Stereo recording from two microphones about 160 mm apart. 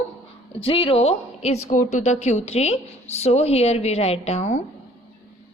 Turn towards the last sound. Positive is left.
turn(degrees=45)  # may be behind; listen again after turning